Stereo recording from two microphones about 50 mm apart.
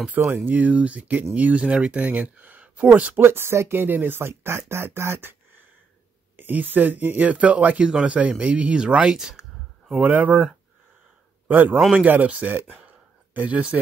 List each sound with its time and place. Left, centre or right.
0.2 s speech: right
3.2 s speech: right
6.3 s speech: right
7.9 s speech: centre
10.0 s speech: right
11.4 s a man's voice: right
12.5 s a sound: right